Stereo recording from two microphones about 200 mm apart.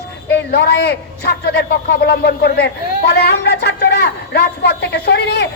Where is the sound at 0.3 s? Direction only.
55° left (ahead or behind).